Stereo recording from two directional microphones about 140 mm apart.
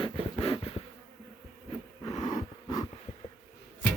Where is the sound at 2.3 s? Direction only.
30° left (ahead or behind).